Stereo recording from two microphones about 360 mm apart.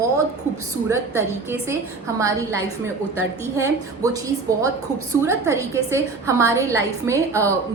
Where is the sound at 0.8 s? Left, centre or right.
Centre.